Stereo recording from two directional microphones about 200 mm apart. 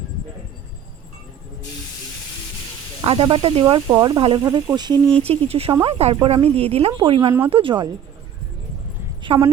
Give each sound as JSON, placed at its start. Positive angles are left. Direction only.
{"t": 3.0, "sound": "speech", "side_deg": -25}
{"t": 9.2, "sound": "speech", "side_deg": -30}